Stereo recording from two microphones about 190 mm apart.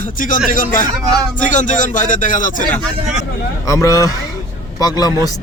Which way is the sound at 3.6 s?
15° left (ahead or behind).